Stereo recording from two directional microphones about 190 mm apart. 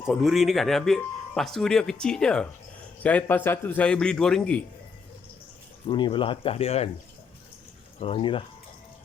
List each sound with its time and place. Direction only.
0.1 s a man's voice: centre (ahead or behind)
5.8 s speech: 25° left (ahead or behind)
7.9 s speech: 30° left (ahead or behind)